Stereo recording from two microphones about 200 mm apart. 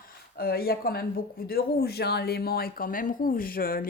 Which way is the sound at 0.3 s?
50° left (ahead or behind).